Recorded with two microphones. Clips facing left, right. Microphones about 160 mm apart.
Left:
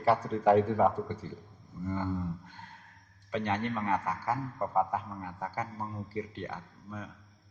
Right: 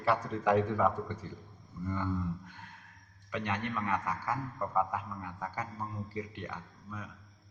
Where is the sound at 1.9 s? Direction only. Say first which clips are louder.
Left 1 dB; 35° left (ahead or behind).